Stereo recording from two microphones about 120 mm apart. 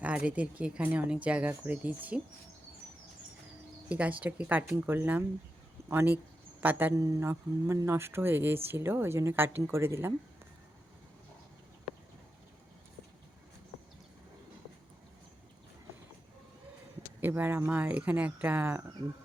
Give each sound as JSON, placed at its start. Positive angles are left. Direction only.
{"t": 0.0, "sound": "speech", "side_deg": -10}
{"t": 3.8, "sound": "speech", "side_deg": -10}
{"t": 17.2, "sound": "speech", "side_deg": -15}